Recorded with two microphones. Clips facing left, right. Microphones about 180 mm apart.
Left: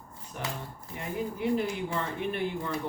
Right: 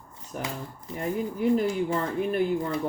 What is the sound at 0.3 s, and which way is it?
Speech, 40° right (ahead or behind).